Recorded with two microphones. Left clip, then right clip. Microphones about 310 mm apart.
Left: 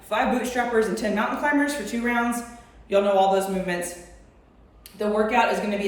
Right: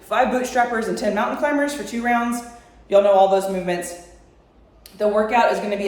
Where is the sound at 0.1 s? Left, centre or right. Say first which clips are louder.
Right 4 dB; right.